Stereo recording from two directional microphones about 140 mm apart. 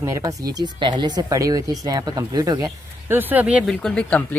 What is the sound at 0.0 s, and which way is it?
Speech, 20° right (ahead or behind).